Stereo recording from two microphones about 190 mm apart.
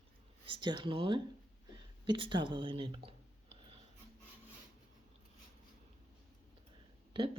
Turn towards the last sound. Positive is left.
turn(degrees=-30)  # may be behind; listen again after turning